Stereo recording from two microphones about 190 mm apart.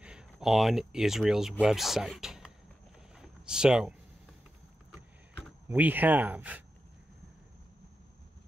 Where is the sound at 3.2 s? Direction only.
5° right (ahead or behind).